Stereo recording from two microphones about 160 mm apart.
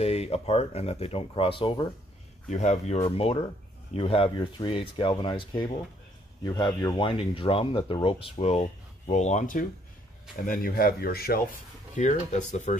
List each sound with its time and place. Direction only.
0.0 s speech: 40° left (ahead or behind)
2.5 s speech: 45° left (ahead or behind); by 11.4 s 70° left (ahead or behind)
11.9 s speech: 50° left (ahead or behind)